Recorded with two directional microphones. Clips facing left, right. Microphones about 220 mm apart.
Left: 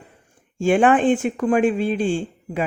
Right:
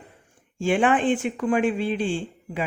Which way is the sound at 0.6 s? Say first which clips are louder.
Left 5 dB; 45° left (ahead or behind).